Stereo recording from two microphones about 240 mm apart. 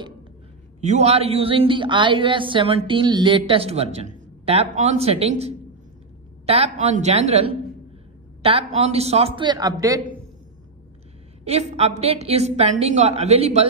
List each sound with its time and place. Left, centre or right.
0.7 s a woman's voice: right
11.4 s a woman's voice: right